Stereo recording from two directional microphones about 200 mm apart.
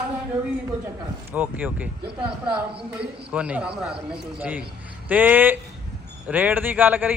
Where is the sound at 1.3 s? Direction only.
10° right (ahead or behind).